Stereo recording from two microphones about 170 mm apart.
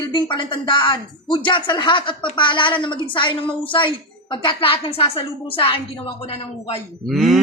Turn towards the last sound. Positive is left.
turn(degrees=0)  # may be behind; listen again after turning